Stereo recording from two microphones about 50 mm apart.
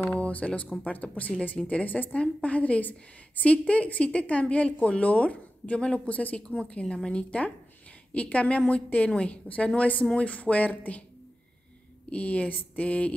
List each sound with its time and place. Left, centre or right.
0.1 s a woman's voice: left
12.1 s a woman's voice: left